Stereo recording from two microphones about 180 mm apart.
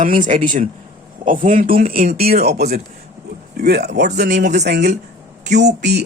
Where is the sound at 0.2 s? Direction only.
45° right (ahead or behind).